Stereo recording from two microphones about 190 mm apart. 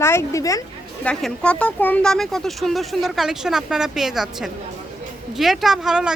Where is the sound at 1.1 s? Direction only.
5° left (ahead or behind).